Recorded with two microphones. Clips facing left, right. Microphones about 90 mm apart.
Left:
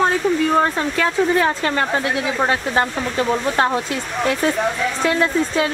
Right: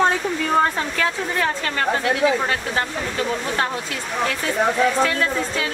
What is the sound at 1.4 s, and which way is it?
Speech, 20° left (ahead or behind).